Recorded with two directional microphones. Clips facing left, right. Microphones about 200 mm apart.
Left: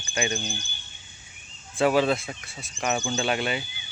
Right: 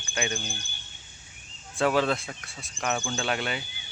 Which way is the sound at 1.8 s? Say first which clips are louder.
Left 3 dB; 5° left (ahead or behind).